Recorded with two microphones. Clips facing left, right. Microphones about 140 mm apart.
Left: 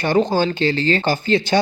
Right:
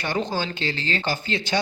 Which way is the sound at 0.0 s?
55° left (ahead or behind).